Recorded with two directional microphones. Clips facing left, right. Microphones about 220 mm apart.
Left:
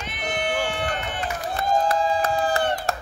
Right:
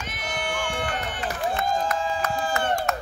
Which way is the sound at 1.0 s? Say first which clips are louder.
Right 1 dB; 45° left (ahead or behind).